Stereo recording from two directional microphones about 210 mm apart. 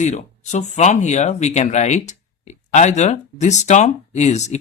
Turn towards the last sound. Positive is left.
turn(degrees=35)  # may be behind; listen again after turning